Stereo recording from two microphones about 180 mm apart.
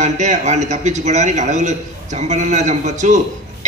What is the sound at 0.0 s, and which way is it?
A man's voice, 40° right (ahead or behind).